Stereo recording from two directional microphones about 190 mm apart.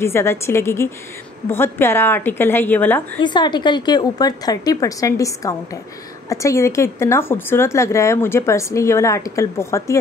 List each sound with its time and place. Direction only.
0.0 s speech: 15° left (ahead or behind)
3.2 s a woman's voice: 25° left (ahead or behind)